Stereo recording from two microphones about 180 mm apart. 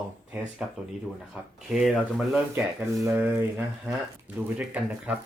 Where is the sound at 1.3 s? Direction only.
5° right (ahead or behind).